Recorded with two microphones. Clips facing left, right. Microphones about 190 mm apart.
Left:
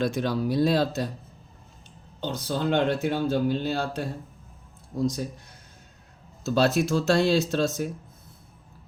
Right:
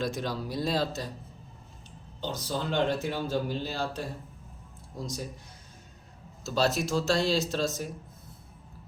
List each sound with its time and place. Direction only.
0.0 s speech: 60° left (ahead or behind)
2.2 s speech: 60° left (ahead or behind)
6.5 s speech: 55° left (ahead or behind)